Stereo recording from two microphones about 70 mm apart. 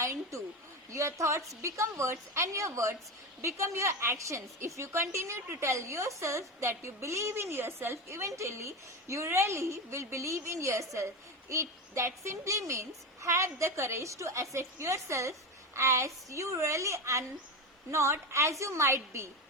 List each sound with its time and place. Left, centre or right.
0.0 s a woman's voice: right